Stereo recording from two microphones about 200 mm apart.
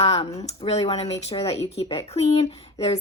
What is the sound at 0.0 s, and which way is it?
Speech, 30° left (ahead or behind).